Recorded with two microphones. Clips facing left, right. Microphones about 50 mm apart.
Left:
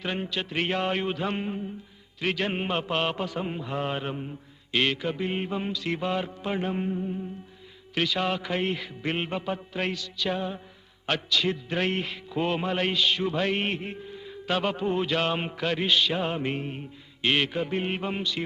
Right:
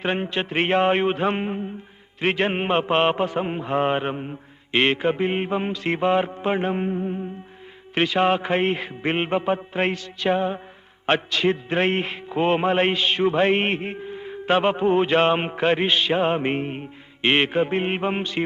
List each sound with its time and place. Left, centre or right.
0.0 s music: right